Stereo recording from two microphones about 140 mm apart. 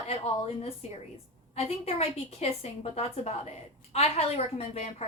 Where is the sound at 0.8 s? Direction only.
50° left (ahead or behind).